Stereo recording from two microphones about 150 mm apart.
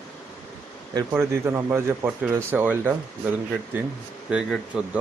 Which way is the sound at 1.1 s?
15° right (ahead or behind).